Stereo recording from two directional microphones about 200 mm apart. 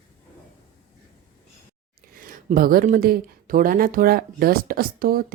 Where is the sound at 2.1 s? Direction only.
45° right (ahead or behind).